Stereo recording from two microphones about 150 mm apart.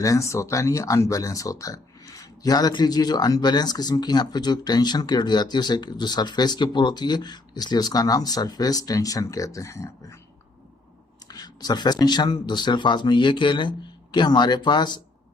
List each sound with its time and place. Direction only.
0.0 s speech: 20° left (ahead or behind)
11.3 s speech: 25° left (ahead or behind)